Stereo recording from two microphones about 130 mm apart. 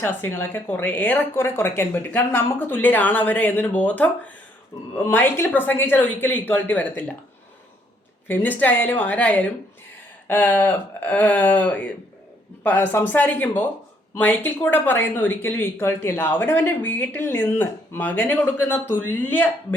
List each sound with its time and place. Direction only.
0.0 s speech: 15° left (ahead or behind)
8.3 s speech: 15° left (ahead or behind)